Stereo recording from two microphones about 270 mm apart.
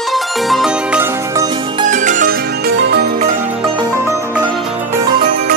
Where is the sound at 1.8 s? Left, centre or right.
Right.